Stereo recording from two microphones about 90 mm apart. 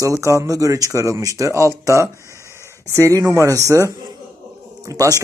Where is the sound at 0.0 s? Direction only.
35° right (ahead or behind).